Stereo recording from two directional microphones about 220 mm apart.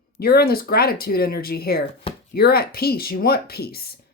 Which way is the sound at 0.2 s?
45° left (ahead or behind).